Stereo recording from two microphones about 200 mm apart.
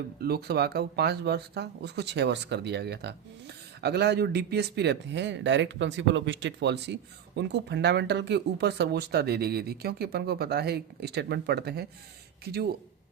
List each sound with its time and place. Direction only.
0.2 s speech: 50° right (ahead or behind)